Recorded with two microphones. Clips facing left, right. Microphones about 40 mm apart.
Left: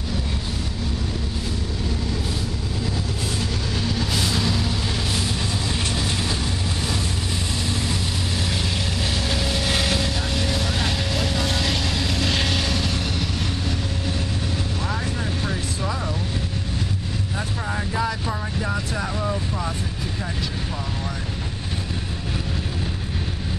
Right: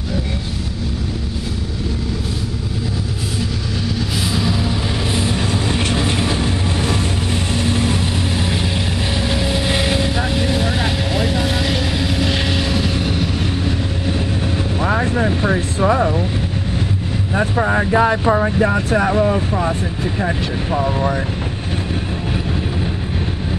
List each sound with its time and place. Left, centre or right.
4.3 s vehicle: centre; by 8.0 s right
9.3 s vehicle: centre
14.8 s vehicle: right
17.4 s vehicle: right